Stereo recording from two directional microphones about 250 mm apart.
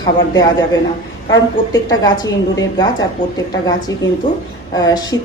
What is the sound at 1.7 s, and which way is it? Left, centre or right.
A woman's voice, centre.